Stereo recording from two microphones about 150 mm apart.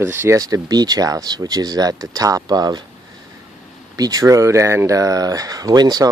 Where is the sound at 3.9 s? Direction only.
25° right (ahead or behind).